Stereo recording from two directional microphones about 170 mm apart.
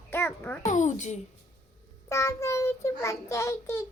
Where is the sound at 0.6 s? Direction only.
45° left (ahead or behind).